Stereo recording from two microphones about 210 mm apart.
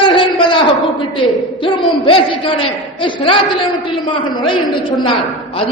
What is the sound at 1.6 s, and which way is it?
A man's voice, 25° left (ahead or behind).